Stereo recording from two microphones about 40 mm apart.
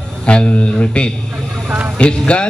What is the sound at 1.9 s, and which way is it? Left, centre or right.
Speech, left.